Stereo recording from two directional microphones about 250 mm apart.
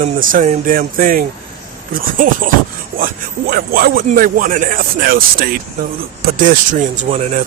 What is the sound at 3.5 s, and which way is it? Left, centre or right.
Speech, right.